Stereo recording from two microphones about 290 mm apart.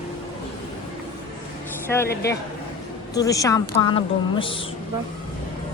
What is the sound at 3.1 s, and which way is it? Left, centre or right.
A woman's voice, centre.